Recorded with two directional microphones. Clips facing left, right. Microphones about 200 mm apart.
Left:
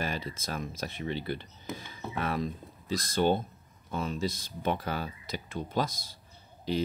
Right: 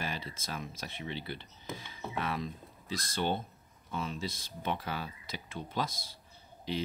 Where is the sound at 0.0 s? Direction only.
45° left (ahead or behind).